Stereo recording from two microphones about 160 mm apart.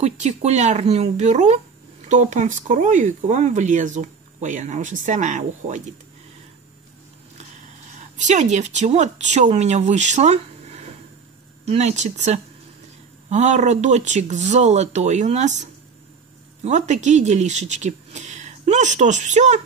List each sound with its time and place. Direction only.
0.0 s speech: 45° right (ahead or behind)
7.9 s speech: 50° right (ahead or behind)